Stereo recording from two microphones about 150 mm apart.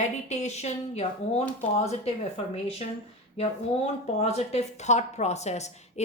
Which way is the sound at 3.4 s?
45° left (ahead or behind).